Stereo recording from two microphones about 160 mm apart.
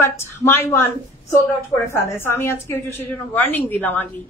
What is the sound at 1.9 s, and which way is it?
Speech, 15° left (ahead or behind).